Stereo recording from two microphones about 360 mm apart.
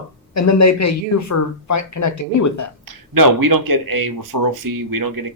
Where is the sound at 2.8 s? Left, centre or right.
Right.